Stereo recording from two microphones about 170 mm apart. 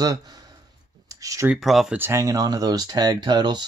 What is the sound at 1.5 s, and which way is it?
Speech, centre (ahead or behind).